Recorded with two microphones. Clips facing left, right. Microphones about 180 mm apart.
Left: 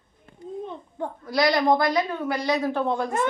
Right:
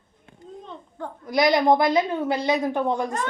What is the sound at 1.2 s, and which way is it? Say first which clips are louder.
A woman's voice: right 2 dB; 20° right (ahead or behind).